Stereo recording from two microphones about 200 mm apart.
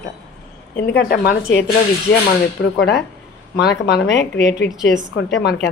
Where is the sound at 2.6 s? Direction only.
65° left (ahead or behind).